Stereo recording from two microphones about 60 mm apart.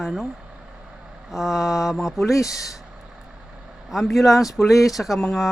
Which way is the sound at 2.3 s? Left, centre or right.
Left.